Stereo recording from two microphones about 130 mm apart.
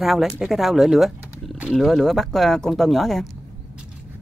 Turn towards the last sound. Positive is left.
turn(degrees=0)  # may be behind; listen again after turning